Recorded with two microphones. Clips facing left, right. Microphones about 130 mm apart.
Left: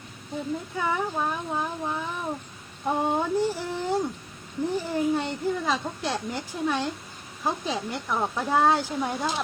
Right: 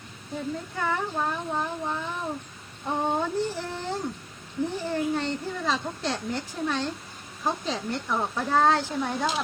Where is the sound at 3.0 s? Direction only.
10° left (ahead or behind).